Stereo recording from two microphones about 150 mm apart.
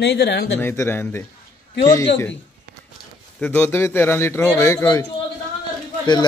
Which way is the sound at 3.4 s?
10° left (ahead or behind).